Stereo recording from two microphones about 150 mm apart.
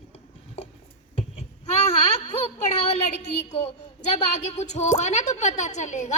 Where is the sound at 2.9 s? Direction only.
50° left (ahead or behind).